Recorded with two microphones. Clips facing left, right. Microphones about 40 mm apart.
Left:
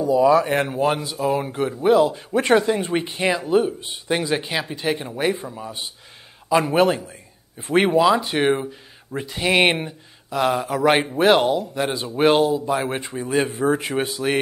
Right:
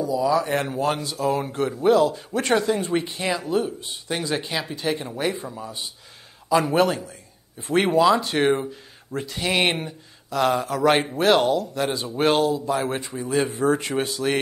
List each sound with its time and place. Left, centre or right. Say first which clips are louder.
0.0 s a man's voice: left 5 dB; left
7.8 s speech: left 1 dB; centre